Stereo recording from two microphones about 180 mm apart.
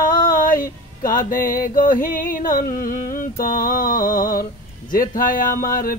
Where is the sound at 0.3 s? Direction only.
50° left (ahead or behind).